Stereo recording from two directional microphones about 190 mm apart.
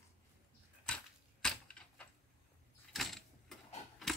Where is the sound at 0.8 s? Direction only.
5° left (ahead or behind).